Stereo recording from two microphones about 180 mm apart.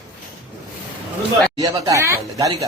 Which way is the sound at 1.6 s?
20° right (ahead or behind).